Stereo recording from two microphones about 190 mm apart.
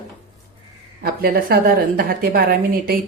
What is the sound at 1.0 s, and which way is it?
A woman's voice, 55° right (ahead or behind).